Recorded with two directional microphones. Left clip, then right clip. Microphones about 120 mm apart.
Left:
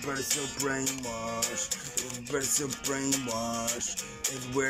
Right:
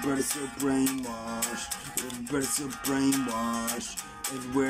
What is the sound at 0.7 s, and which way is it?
Music, 20° right (ahead or behind).